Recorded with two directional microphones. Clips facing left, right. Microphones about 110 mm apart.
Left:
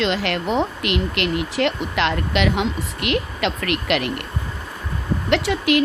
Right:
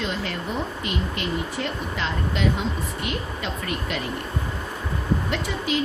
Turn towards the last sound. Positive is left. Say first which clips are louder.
# left 7 dB
turn(degrees=70)  # may be behind; listen again after turning